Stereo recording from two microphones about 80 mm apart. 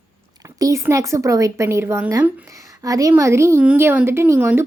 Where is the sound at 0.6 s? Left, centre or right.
Right.